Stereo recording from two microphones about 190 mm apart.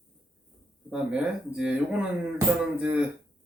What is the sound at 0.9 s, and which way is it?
Speech, 5° right (ahead or behind).